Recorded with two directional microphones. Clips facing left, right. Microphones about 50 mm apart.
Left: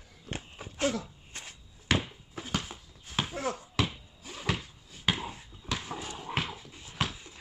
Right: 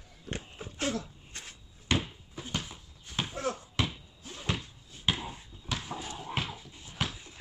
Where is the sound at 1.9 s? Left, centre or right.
Left.